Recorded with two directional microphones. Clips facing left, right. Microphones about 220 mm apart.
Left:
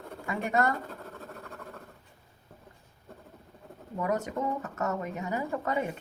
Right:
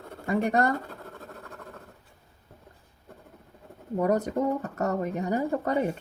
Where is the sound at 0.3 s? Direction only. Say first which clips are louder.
Right 4 dB; 40° right (ahead or behind).